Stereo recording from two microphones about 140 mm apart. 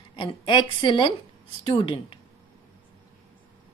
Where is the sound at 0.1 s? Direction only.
35° left (ahead or behind).